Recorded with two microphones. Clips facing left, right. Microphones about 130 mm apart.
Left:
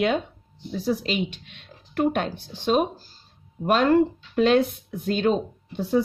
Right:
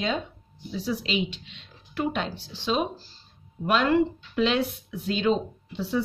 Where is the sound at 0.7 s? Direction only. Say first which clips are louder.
Left 3 dB; 50° left (ahead or behind).